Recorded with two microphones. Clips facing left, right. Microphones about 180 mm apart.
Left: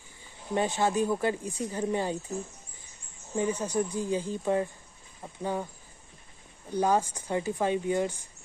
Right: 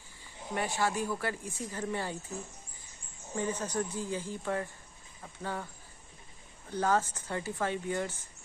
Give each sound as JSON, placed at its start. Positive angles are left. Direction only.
{"t": 0.6, "sound": "speech", "side_deg": 20}
{"t": 3.3, "sound": "speech", "side_deg": 15}
{"t": 6.7, "sound": "speech", "side_deg": 15}